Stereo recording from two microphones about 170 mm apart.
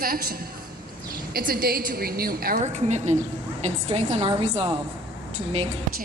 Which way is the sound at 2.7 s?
45° right (ahead or behind).